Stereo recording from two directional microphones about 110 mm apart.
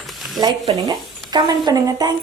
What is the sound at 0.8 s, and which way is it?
Speech, 40° right (ahead or behind).